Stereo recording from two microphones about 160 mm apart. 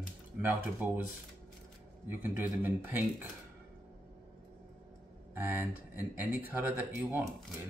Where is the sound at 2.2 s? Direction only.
10° right (ahead or behind).